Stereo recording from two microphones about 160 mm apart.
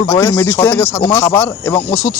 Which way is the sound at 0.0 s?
15° left (ahead or behind).